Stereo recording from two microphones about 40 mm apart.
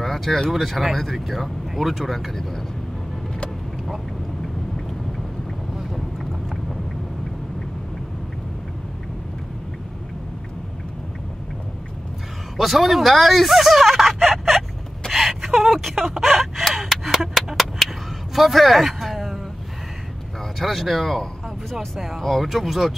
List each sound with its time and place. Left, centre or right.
0.0 s a sound: centre
0.5 s speech: centre
5.8 s boat: centre
12.5 s speech: centre
15.0 s gasp: centre
18.3 s speech: centre
20.5 s speech: centre